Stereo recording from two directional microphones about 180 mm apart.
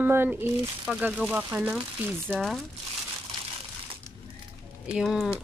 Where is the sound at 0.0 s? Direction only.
10° right (ahead or behind).